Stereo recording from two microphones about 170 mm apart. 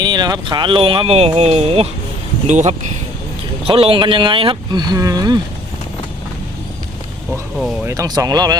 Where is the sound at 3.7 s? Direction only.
35° right (ahead or behind).